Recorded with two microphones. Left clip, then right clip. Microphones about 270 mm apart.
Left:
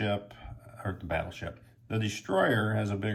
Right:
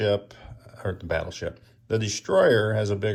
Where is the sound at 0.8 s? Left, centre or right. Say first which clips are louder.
Right 5 dB; centre.